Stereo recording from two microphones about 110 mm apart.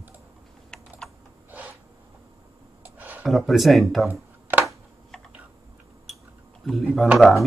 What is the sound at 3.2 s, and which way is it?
Speech, centre (ahead or behind).